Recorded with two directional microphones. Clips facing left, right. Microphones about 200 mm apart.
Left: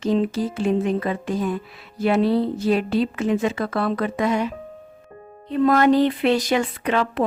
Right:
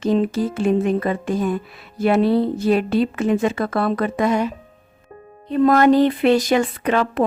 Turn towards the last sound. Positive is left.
turn(degrees=-45)  # may be behind; listen again after turning